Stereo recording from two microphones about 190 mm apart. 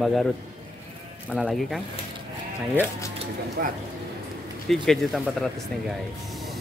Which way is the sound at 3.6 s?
55° right (ahead or behind).